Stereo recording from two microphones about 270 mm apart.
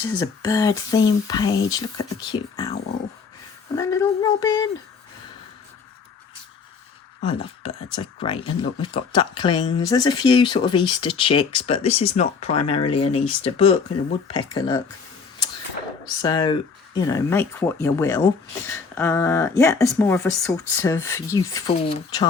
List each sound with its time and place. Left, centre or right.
0.2 s speech: centre
3.8 s speech: centre
7.3 s speech: centre
16.2 s speech: centre